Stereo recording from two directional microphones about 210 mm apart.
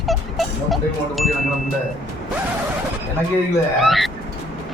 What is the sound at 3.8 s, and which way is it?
Speech, centre (ahead or behind).